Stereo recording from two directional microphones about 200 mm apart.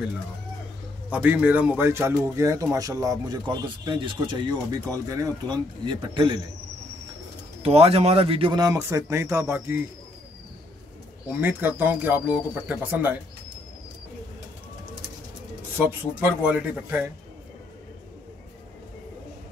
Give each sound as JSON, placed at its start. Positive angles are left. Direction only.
{"t": 1.1, "sound": "speech", "side_deg": -10}
{"t": 7.6, "sound": "speech", "side_deg": -30}
{"t": 11.2, "sound": "speech", "side_deg": -10}
{"t": 15.8, "sound": "speech", "side_deg": -10}